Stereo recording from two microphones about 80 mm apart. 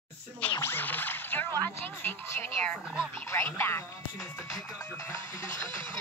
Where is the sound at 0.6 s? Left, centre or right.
Left.